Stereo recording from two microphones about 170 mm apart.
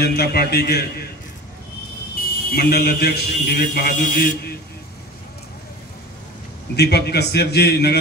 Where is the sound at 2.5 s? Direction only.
65° left (ahead or behind).